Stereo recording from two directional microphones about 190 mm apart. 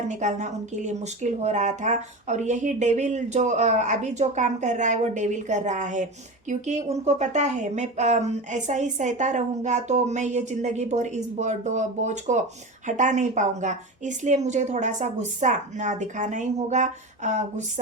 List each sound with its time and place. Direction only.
0.1 s a woman's voice: 40° right (ahead or behind)